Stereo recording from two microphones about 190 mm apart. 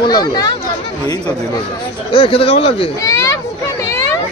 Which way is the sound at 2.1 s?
30° left (ahead or behind).